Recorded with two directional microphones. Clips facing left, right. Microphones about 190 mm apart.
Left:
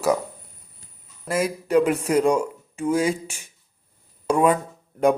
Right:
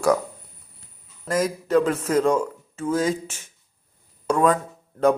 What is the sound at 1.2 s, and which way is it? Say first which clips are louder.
Speech: right 1 dB; 10° left (ahead or behind).